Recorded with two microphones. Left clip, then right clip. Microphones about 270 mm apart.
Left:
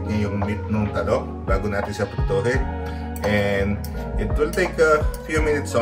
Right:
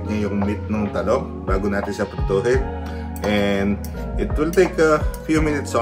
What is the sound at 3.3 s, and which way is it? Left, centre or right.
Speech, right.